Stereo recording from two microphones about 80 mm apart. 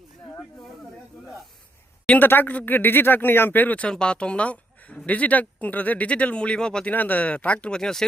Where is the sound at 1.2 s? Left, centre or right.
Centre.